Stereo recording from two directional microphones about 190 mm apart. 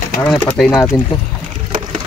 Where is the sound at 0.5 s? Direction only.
Centre (ahead or behind).